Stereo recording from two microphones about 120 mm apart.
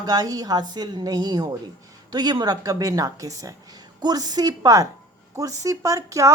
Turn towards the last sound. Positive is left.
turn(degrees=-25)  # may be behind; listen again after turning